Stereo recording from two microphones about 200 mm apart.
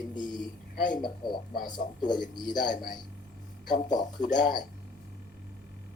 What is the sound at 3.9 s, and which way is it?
Speech, 20° left (ahead or behind).